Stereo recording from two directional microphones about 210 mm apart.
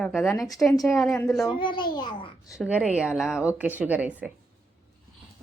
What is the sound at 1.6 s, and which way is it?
Speech, 20° left (ahead or behind).